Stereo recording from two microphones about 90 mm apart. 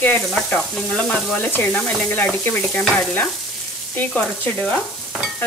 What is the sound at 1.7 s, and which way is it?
Sizzle, 10° left (ahead or behind).